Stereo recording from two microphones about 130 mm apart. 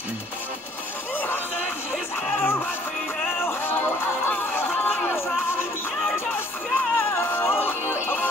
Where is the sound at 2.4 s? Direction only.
15° left (ahead or behind).